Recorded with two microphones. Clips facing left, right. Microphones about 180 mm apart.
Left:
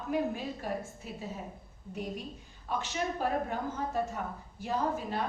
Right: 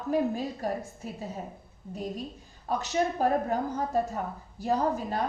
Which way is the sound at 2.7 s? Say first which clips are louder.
Right 6 dB; 40° right (ahead or behind).